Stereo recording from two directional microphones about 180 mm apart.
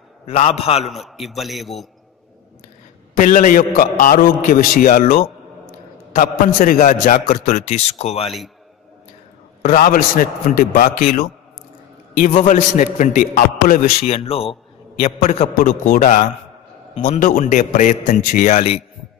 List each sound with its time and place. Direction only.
0.3 s a man's voice: 35° left (ahead or behind)
0.8 s a man's voice: centre (ahead or behind)
3.2 s a man's voice: 50° left (ahead or behind)
9.6 s a man's voice: 50° left (ahead or behind)
14.0 s a man's voice: 35° left (ahead or behind)